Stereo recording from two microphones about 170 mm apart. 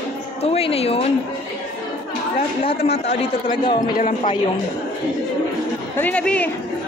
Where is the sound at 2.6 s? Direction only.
35° left (ahead or behind).